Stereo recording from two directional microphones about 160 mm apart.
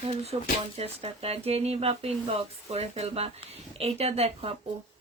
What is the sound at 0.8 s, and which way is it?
Speech, 40° right (ahead or behind).